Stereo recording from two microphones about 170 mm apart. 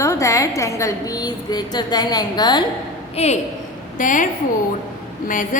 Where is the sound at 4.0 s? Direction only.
50° left (ahead or behind).